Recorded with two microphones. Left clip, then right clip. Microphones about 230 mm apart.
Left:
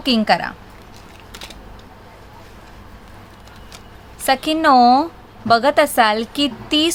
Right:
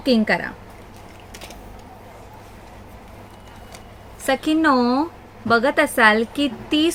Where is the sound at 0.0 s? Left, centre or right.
Left.